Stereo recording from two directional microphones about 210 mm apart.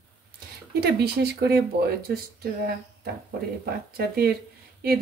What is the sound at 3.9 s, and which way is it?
Speech, 45° right (ahead or behind).